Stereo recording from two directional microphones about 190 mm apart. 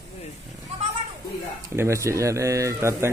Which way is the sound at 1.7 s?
15° right (ahead or behind).